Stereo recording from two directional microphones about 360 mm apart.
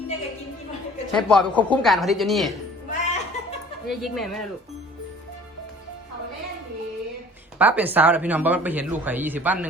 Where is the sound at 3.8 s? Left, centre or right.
Centre.